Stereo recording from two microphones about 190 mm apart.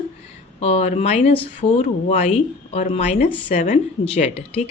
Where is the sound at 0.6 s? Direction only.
35° left (ahead or behind).